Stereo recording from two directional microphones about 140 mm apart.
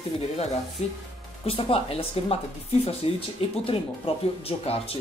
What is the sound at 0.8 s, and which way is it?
Speech, 50° left (ahead or behind).